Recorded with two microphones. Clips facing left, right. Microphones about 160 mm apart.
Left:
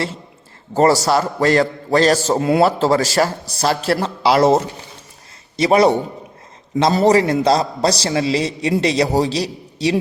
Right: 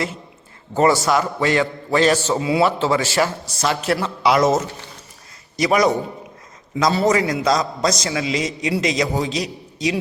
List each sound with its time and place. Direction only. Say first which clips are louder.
0.8 s a man's voice: left 2 dB; 35° left (ahead or behind)
2.4 s a man's voice: left 5 dB; 50° left (ahead or behind)
2.6 s a man's voice: left 3 dB; 40° left (ahead or behind)